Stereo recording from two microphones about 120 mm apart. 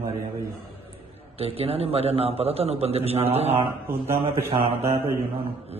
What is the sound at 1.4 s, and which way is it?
A man's voice, 55° right (ahead or behind).